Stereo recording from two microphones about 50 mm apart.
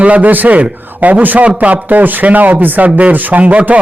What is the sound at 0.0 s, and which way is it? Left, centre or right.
A man's voice, right.